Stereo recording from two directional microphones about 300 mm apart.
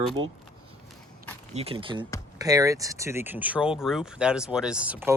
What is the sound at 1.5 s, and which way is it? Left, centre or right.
Speech, centre.